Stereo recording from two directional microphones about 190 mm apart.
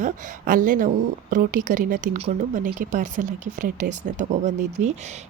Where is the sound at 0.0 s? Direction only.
40° right (ahead or behind).